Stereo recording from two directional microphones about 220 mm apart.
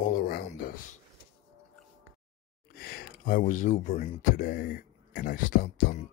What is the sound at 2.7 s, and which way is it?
Speech, 45° left (ahead or behind).